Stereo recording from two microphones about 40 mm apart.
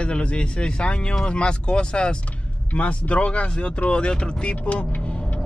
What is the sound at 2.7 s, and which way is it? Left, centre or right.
Speech, left.